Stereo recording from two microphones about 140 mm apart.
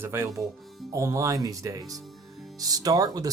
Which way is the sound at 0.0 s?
15° right (ahead or behind).